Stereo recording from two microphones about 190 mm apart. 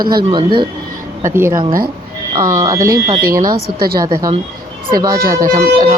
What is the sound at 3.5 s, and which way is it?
Speech, 55° right (ahead or behind).